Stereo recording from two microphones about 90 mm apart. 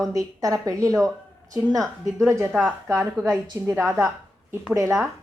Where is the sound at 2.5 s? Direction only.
Centre (ahead or behind).